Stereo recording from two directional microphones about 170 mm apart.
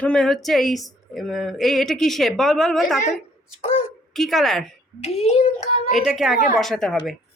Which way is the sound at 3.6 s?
35° left (ahead or behind).